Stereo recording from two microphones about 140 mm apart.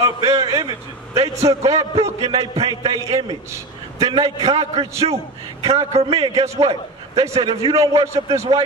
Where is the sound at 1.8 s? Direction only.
50° right (ahead or behind).